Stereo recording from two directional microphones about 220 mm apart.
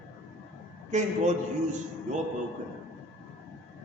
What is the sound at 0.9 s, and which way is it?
Speech, 30° right (ahead or behind).